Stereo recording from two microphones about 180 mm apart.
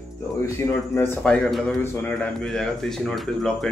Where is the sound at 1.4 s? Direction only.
Centre (ahead or behind).